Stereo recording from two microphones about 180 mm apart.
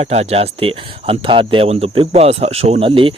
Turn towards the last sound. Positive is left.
turn(degrees=-30)  # may be behind; listen again after turning